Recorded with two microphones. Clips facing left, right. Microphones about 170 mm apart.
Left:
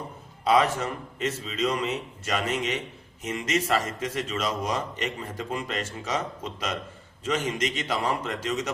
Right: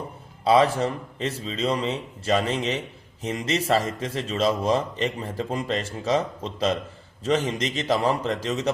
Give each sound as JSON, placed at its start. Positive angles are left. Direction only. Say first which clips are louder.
{"t": 0.4, "sound": "a man's voice", "louder": "right 4 dB", "side_deg": -30}